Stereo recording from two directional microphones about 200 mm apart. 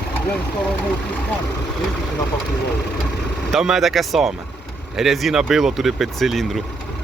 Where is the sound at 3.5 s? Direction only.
Centre (ahead or behind).